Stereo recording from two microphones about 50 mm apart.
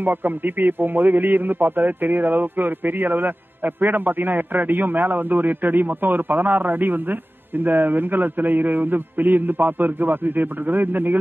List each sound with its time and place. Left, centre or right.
0.0 s a man's voice: right